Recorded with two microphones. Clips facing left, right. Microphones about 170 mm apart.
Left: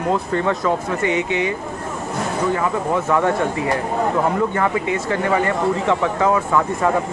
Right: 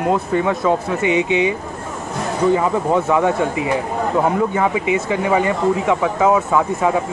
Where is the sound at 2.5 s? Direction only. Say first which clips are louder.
Right 3 dB; 15° right (ahead or behind).